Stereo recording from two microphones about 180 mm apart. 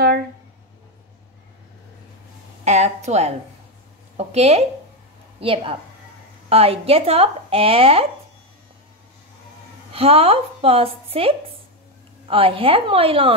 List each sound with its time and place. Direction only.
2.6 s a woman's voice: 40° right (ahead or behind)
9.9 s speech: 35° right (ahead or behind)